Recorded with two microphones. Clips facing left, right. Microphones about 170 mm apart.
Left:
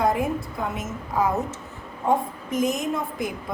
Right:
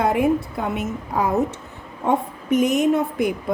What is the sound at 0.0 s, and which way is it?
A woman's voice, 65° right (ahead or behind).